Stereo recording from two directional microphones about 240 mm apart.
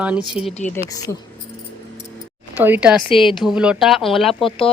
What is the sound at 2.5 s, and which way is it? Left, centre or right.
Speech, centre.